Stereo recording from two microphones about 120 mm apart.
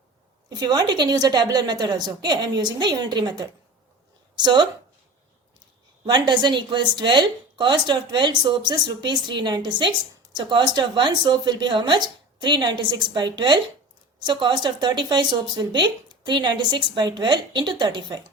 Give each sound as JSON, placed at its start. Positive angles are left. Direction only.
{"t": 0.6, "sound": "a woman's voice", "side_deg": -35}
{"t": 6.1, "sound": "speech", "side_deg": -40}